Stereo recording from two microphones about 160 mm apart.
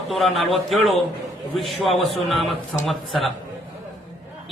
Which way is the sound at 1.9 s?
35° left (ahead or behind).